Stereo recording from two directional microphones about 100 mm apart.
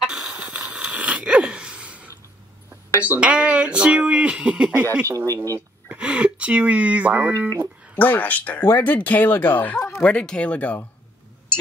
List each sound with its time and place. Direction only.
0.0 s wheeze: 5° right (ahead or behind)
3.0 s speech: 15° right (ahead or behind)
5.0 s speech: 30° right (ahead or behind)
5.9 s speech: 10° right (ahead or behind)
7.9 s speech: 15° left (ahead or behind)